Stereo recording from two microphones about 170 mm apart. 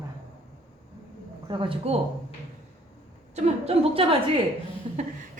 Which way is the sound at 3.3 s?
35° right (ahead or behind).